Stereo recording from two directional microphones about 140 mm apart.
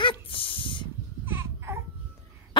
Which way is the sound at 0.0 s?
35° left (ahead or behind).